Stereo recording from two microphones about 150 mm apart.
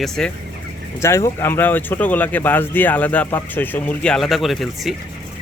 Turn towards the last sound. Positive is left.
turn(degrees=0)  # may be behind; listen again after turning